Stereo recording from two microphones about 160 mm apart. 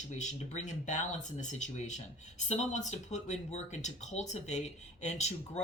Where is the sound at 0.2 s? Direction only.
45° left (ahead or behind).